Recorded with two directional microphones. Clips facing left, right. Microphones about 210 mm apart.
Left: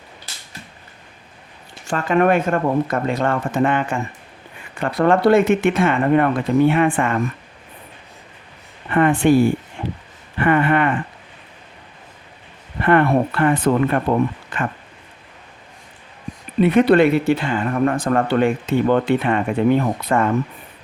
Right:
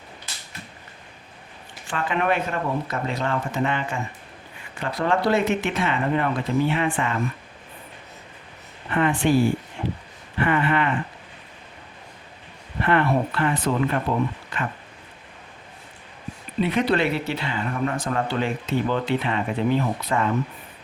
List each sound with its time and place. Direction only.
1.9 s speech: 45° left (ahead or behind)
8.9 s speech: 55° left (ahead or behind)
10.4 s speech: 55° left (ahead or behind)
12.8 s speech: 50° left (ahead or behind)
16.6 s speech: 55° left (ahead or behind)